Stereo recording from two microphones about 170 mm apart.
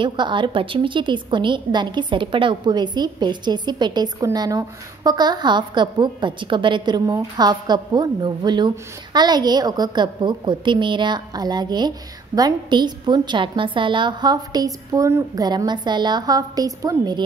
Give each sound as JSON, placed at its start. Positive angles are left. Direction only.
{"t": 0.0, "sound": "a woman's voice", "side_deg": -30}